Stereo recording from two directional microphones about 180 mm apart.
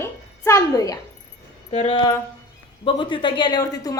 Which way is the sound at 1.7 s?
35° left (ahead or behind).